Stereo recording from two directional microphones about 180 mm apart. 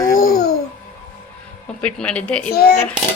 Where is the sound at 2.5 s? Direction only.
60° left (ahead or behind).